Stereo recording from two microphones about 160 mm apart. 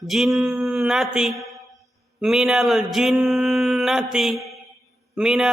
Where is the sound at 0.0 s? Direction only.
Centre (ahead or behind).